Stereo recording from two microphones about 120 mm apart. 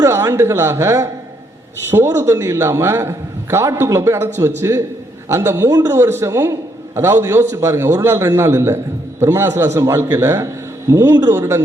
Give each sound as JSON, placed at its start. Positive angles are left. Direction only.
{"t": 0.0, "sound": "a man's voice", "side_deg": -25}